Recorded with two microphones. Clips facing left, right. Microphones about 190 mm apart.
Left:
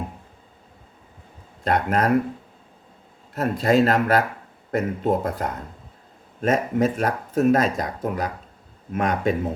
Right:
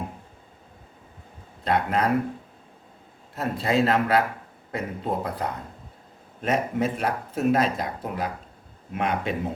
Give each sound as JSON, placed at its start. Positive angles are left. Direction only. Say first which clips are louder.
{"t": 1.6, "sound": "speech", "louder": "left 2 dB", "side_deg": 45}
{"t": 3.3, "sound": "speech", "louder": "left 5 dB", "side_deg": 45}